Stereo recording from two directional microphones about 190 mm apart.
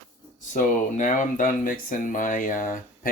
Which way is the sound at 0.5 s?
40° left (ahead or behind).